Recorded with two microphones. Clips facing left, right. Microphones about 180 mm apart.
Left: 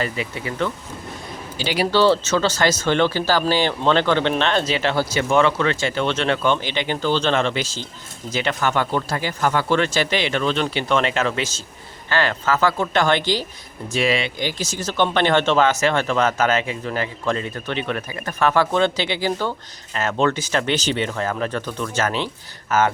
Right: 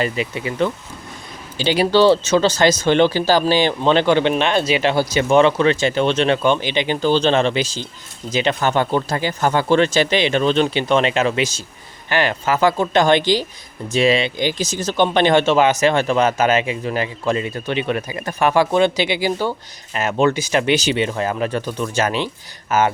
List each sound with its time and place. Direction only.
0.0 s speech: 20° right (ahead or behind)